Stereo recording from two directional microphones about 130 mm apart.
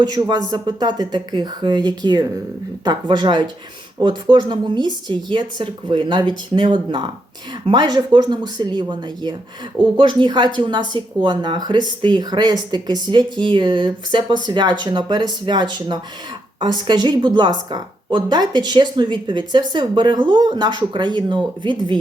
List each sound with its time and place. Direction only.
0.0 s a woman's voice: 30° right (ahead or behind)